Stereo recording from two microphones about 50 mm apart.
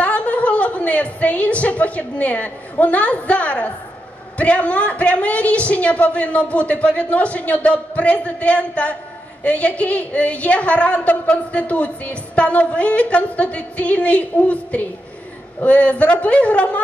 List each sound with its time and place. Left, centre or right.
0.0 s a woman's voice: left